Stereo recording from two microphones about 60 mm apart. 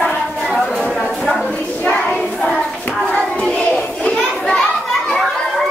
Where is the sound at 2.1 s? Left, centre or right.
Centre.